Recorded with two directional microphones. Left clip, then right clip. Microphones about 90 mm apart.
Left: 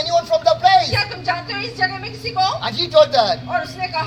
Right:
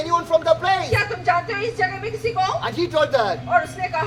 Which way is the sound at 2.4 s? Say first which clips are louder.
Left 4 dB; 50° right (ahead or behind).